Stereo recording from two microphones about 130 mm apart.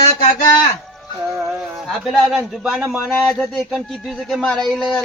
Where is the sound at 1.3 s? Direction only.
20° right (ahead or behind).